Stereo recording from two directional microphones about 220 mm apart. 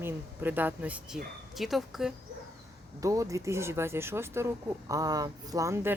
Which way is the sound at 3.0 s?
15° right (ahead or behind).